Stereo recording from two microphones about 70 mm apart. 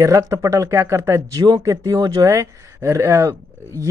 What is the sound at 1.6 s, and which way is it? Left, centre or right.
Speech, right.